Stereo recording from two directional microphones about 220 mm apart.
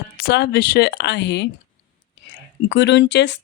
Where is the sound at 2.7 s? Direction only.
50° left (ahead or behind).